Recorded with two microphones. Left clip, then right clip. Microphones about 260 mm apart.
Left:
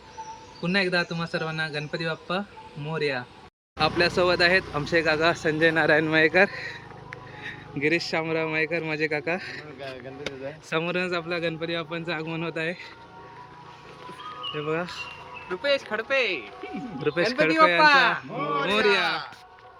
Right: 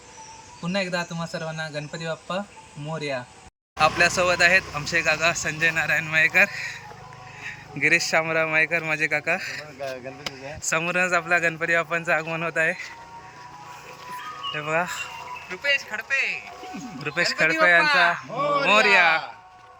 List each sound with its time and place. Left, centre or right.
0.6 s speech: centre
7.8 s speech: centre
14.5 s speech: centre
15.6 s speech: left
17.0 s speech: centre
17.8 s speech: left
18.4 s speech: centre
18.9 s speech: centre